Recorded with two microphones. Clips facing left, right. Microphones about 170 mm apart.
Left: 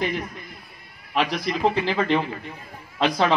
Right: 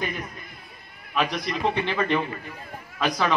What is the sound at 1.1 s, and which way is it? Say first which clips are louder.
Speech: left 2 dB; 30° left (ahead or behind).